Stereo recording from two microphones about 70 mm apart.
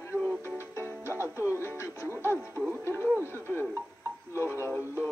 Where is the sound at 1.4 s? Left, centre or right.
Left.